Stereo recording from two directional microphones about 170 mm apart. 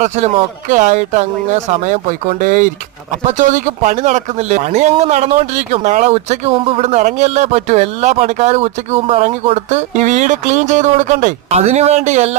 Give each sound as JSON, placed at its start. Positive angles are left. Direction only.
{"t": 0.0, "sound": "speech", "side_deg": -45}